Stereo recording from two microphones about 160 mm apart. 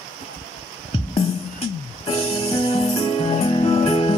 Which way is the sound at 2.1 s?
35° left (ahead or behind).